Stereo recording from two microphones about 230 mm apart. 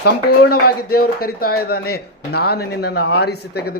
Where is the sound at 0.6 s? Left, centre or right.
Left.